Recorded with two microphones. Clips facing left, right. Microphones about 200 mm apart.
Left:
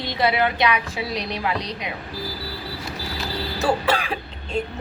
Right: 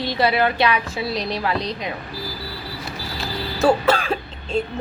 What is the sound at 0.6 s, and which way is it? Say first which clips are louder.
Speech: right 2 dB; 15° left (ahead or behind).